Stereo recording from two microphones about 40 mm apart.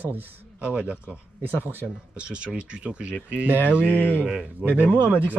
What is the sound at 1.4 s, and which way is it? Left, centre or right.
Speech, right.